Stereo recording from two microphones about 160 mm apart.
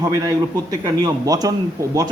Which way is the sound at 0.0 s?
25° right (ahead or behind).